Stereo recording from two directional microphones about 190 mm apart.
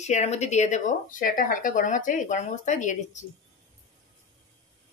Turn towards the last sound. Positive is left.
turn(degrees=40)  # may be behind; listen again after turning